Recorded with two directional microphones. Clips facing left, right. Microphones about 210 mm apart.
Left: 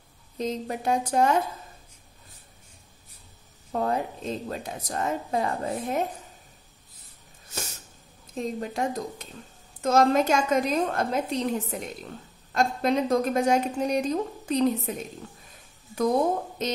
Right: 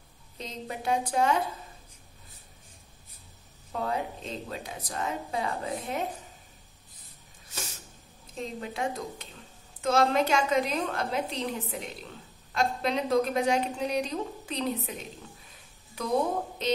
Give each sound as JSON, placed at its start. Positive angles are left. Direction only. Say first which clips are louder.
{"t": 0.4, "sound": "a woman's voice", "louder": "left 8 dB", "side_deg": 45}
{"t": 3.7, "sound": "a woman's voice", "louder": "left 4 dB", "side_deg": 45}
{"t": 8.4, "sound": "a woman's voice", "louder": "left 5 dB", "side_deg": 45}
{"t": 16.6, "sound": "a woman's voice", "louder": "right 3 dB", "side_deg": 45}